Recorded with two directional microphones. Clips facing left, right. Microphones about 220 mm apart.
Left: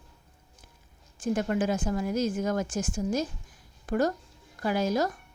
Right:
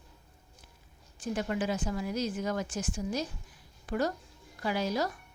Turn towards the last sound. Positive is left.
turn(degrees=45)  # may be behind; listen again after turning